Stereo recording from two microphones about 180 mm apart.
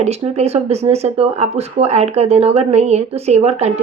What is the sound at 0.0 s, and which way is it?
Speech, 35° right (ahead or behind).